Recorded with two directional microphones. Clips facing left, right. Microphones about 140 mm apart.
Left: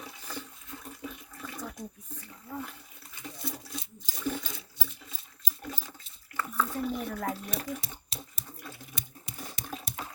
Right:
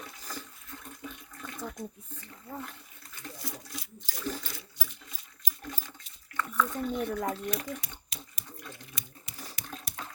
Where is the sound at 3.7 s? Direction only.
20° left (ahead or behind).